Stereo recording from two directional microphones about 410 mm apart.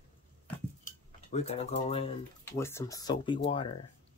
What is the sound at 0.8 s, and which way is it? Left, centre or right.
Speech, centre.